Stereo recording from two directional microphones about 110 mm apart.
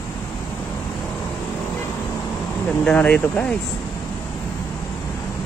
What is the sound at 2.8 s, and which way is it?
Speech, 10° left (ahead or behind).